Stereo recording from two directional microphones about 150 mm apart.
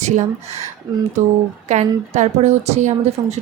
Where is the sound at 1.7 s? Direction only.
50° right (ahead or behind).